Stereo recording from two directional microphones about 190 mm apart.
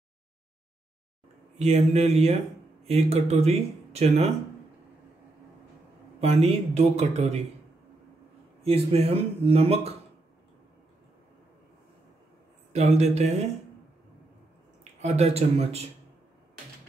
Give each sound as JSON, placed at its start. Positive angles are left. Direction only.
{"t": 1.6, "sound": "speech", "side_deg": -35}
{"t": 6.2, "sound": "speech", "side_deg": -35}
{"t": 8.6, "sound": "speech", "side_deg": -30}
{"t": 12.7, "sound": "speech", "side_deg": -35}
{"t": 15.0, "sound": "speech", "side_deg": -35}